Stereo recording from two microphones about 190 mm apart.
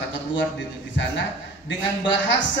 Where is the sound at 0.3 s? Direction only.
75° left (ahead or behind).